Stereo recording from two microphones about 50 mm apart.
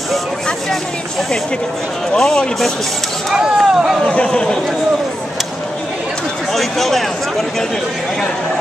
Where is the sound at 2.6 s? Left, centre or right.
Centre.